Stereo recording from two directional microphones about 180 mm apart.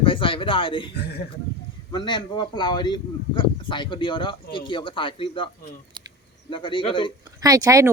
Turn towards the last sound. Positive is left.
turn(degrees=-20)  # may be behind; listen again after turning